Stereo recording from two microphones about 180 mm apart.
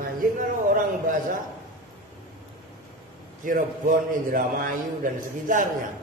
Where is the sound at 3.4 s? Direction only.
50° right (ahead or behind).